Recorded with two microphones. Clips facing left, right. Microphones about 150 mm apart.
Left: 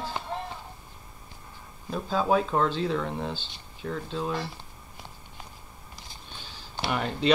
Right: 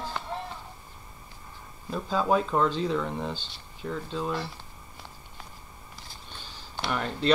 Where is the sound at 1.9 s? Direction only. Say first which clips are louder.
Left 1 dB; 5° left (ahead or behind).